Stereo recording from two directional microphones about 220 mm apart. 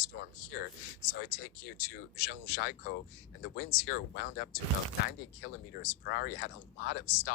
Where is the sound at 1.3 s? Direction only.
40° left (ahead or behind).